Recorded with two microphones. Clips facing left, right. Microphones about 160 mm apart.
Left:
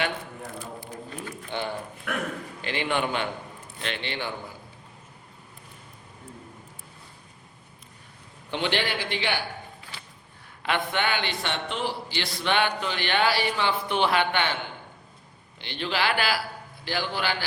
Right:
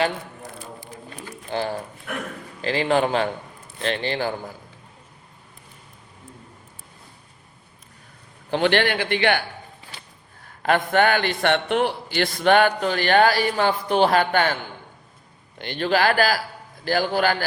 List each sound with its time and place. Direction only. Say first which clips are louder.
1.5 s a man's voice: right 6 dB; 35° right (ahead or behind)
8.4 s a man's voice: right 8 dB; 40° right (ahead or behind)
8.7 s a man's voice: right 7 dB; 60° right (ahead or behind)
10.6 s a man's voice: right 8 dB; 45° right (ahead or behind)